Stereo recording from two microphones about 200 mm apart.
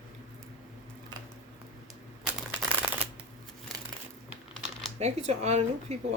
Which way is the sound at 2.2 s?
5° right (ahead or behind).